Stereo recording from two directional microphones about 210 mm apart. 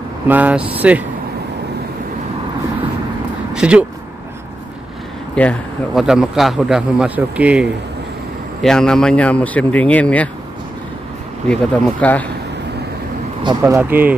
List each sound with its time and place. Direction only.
0.3 s speech: 5° right (ahead or behind)
3.5 s speech: 5° right (ahead or behind)
5.3 s speech: 5° left (ahead or behind)
8.6 s speech: 5° left (ahead or behind)
11.4 s speech: 5° left (ahead or behind)
13.4 s speech: 15° right (ahead or behind)